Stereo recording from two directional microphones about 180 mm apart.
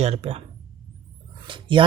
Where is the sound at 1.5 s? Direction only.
30° right (ahead or behind).